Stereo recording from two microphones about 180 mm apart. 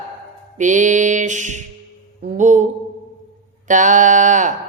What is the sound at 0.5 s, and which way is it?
Mantra, 45° right (ahead or behind).